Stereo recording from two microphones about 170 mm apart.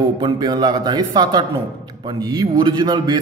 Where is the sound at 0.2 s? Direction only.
25° right (ahead or behind).